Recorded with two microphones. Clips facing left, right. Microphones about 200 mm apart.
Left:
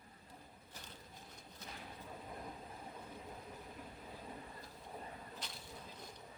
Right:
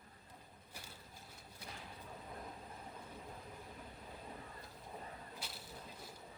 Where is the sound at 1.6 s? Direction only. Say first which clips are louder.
Even; 10° right (ahead or behind).